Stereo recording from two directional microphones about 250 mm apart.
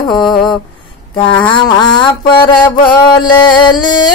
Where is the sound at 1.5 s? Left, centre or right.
Centre.